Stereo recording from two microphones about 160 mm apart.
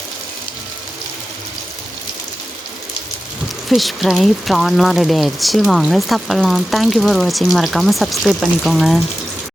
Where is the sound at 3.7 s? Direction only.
Centre (ahead or behind).